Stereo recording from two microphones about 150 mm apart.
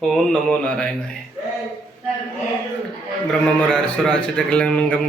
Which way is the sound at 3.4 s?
5° left (ahead or behind).